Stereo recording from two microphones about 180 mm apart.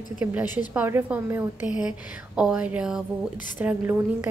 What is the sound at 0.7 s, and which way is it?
A woman's voice, 10° right (ahead or behind).